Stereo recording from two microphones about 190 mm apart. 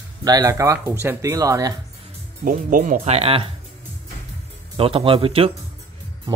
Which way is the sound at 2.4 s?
45° right (ahead or behind).